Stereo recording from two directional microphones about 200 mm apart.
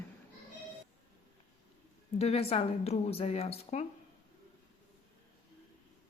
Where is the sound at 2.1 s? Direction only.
30° left (ahead or behind).